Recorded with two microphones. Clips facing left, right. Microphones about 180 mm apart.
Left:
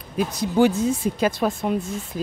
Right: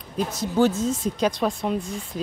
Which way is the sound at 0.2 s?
15° left (ahead or behind).